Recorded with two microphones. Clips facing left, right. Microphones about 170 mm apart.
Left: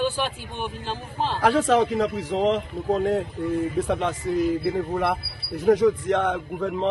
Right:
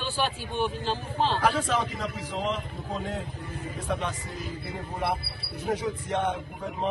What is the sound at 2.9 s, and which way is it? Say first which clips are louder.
Speech: left 12 dB; 60° left (ahead or behind).